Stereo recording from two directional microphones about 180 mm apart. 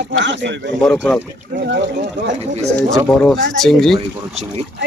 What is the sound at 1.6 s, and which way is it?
Speech, 65° right (ahead or behind).